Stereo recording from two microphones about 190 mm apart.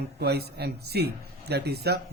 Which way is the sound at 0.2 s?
60° right (ahead or behind).